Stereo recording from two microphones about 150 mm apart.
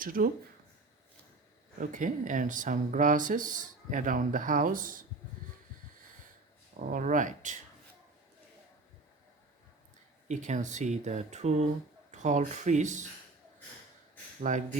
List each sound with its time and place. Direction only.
0.0 s speech: 70° right (ahead or behind)
1.8 s speech: 60° right (ahead or behind)
6.7 s speech: 65° right (ahead or behind)
10.2 s speech: 55° right (ahead or behind)
14.4 s speech: 60° right (ahead or behind)